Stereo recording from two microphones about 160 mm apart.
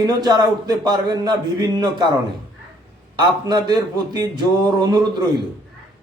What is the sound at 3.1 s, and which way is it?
A man's voice, 25° right (ahead or behind).